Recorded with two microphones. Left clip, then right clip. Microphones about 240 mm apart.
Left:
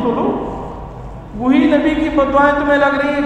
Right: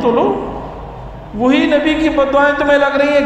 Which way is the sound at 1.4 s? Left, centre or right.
Right.